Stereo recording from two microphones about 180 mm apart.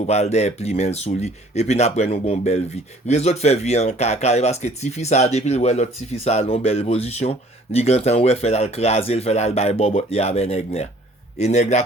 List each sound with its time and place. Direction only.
0.0 s speech: 35° left (ahead or behind)